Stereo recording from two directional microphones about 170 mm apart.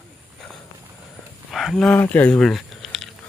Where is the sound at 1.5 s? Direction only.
Centre (ahead or behind).